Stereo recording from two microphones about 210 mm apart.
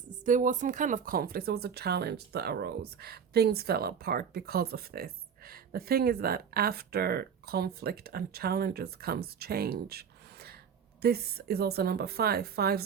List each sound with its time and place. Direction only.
0.3 s speech: 35° right (ahead or behind)